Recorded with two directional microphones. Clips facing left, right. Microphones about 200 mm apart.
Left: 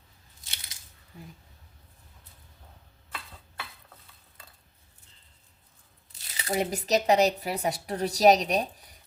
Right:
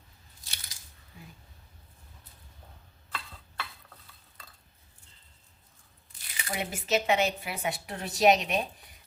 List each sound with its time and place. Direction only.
0.4 s a sound: 20° left (ahead or behind)
1.1 s speech: 40° left (ahead or behind)
6.2 s speech: 40° left (ahead or behind)